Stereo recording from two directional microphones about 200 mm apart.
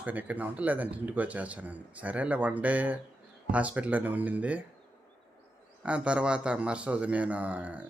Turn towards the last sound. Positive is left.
turn(degrees=-5)  # may be behind; listen again after turning